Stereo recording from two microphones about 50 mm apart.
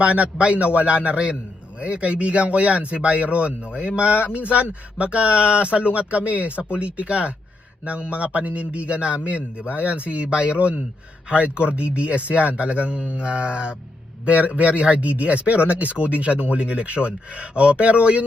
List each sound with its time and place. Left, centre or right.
0.0 s speech: right